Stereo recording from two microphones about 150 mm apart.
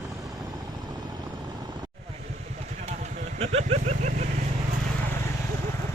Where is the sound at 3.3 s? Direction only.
45° right (ahead or behind).